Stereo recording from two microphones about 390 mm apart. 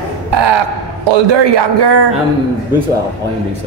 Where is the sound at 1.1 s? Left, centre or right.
Right.